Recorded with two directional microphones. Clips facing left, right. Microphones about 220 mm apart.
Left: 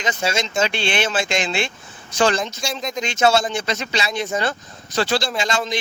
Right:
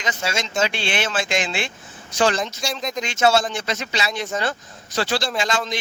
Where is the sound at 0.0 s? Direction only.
25° left (ahead or behind).